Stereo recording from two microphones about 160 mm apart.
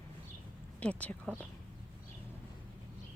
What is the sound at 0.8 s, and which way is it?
Speech, 10° left (ahead or behind).